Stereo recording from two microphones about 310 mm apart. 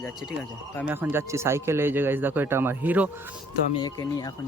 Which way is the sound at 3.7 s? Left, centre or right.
Centre.